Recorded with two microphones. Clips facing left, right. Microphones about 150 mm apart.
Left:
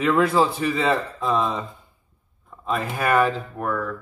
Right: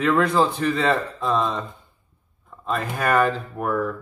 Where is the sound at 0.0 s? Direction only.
5° left (ahead or behind).